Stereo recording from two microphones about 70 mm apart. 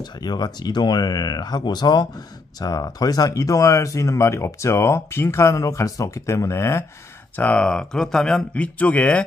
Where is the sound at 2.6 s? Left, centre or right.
Left.